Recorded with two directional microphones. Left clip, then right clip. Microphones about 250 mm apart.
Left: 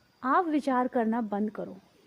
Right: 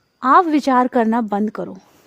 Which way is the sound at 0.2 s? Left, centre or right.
Right.